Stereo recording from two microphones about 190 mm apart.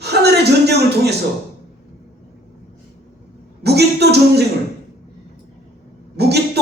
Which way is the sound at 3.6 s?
60° right (ahead or behind).